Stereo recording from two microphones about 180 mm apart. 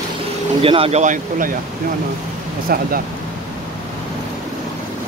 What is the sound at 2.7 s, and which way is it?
Speech, 55° right (ahead or behind).